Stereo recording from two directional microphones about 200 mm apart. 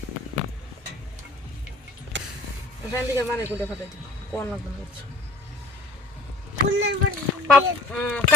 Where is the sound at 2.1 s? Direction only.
65° right (ahead or behind).